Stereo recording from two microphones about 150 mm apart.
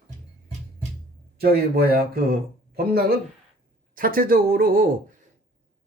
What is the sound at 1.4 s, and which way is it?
Speech, 90° right.